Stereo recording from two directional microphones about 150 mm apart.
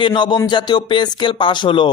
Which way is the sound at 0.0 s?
30° left (ahead or behind).